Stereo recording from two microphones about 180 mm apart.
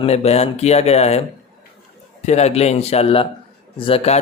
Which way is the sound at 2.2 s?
35° left (ahead or behind).